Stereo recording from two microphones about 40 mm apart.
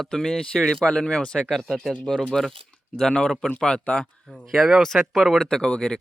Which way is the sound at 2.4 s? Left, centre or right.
Centre.